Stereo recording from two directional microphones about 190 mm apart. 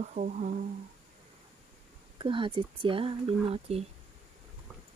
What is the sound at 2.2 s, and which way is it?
Speech, 25° right (ahead or behind).